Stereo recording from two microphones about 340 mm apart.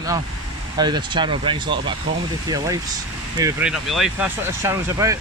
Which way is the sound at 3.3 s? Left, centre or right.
Centre.